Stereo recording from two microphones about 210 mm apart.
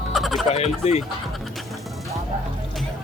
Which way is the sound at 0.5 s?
30° left (ahead or behind).